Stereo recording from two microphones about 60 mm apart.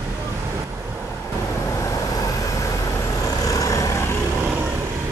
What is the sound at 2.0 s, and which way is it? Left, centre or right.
Vehicle, left.